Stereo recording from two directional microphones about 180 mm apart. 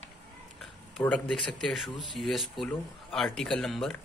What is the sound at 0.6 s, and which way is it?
Speech, 5° left (ahead or behind).